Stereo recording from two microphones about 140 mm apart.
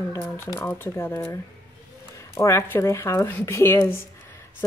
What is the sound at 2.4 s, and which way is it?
Speech, 20° left (ahead or behind).